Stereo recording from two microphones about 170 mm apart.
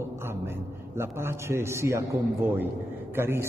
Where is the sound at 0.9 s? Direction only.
15° right (ahead or behind).